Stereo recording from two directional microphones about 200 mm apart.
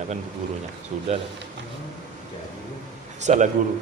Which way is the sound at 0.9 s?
40° right (ahead or behind).